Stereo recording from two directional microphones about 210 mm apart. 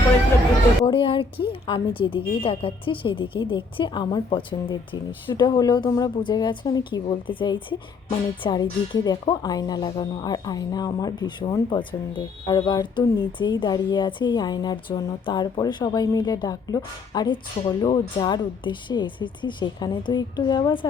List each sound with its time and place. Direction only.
0.9 s speech: 25° left (ahead or behind)